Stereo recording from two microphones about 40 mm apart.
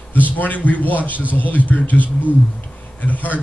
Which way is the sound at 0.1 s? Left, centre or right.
Left.